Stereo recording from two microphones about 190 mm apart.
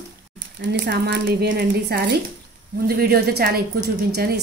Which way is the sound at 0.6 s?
60° right (ahead or behind).